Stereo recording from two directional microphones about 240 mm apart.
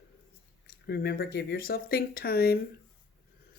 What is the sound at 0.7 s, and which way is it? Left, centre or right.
Speech, left.